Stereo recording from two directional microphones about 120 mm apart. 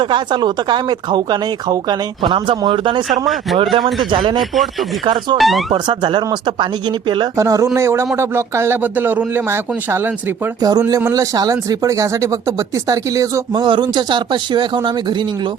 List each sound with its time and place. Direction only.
0.0 s speech: 40° right (ahead or behind)
4.4 s speech: centre (ahead or behind)
5.0 s speech: 40° right (ahead or behind)
5.4 s speech: centre (ahead or behind)
5.7 s speech: 40° right (ahead or behind)
7.3 s speech: 25° right (ahead or behind)
10.6 s speech: 30° right (ahead or behind)
13.6 s speech: 40° right (ahead or behind)